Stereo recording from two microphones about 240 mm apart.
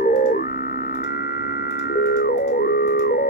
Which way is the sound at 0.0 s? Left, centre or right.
Left.